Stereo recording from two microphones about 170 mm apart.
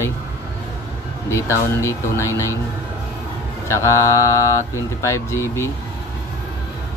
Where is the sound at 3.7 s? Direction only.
15° left (ahead or behind).